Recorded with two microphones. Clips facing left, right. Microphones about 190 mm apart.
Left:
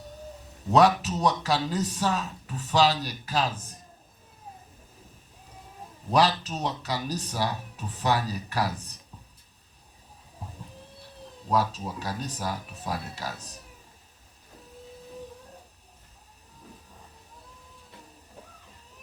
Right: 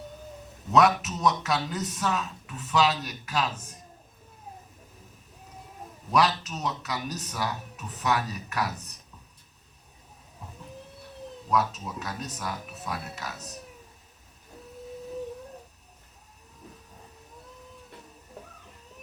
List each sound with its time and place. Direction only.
0.7 s speech: 35° left (ahead or behind)
6.1 s speech: 30° left (ahead or behind)
10.4 s a sound: 30° left (ahead or behind)
11.4 s speech: 30° left (ahead or behind)